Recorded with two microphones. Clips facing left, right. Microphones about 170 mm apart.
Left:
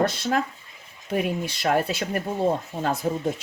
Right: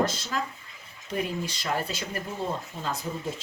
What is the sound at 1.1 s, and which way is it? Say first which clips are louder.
Speech: left 5 dB; 60° left (ahead or behind).